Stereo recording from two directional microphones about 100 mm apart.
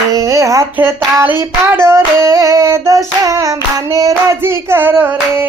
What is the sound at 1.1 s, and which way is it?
Child singing, 20° right (ahead or behind).